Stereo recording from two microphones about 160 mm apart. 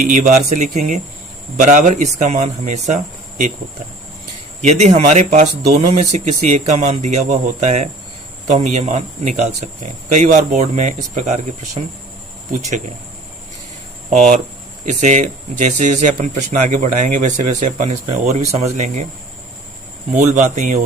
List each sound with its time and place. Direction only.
0.0 s speech: 50° right (ahead or behind)
4.6 s speech: 45° right (ahead or behind)
14.1 s speech: 45° right (ahead or behind)
20.1 s speech: 45° right (ahead or behind)